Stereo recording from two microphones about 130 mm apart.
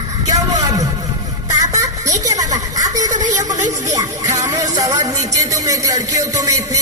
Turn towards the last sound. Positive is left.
turn(degrees=-25)  # may be behind; listen again after turning